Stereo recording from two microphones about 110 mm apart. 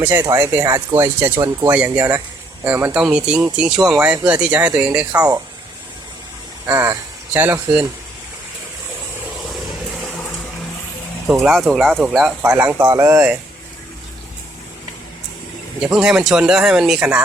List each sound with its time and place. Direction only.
0.0 s speech: 15° right (ahead or behind)
1.7 s speech: 15° right (ahead or behind)
6.7 s speech: 25° right (ahead or behind)
11.4 s speech: centre (ahead or behind)
12.4 s speech: 15° right (ahead or behind)
12.8 s speech: 30° right (ahead or behind)
13.1 s speech: 15° right (ahead or behind)
15.8 s speech: 5° right (ahead or behind)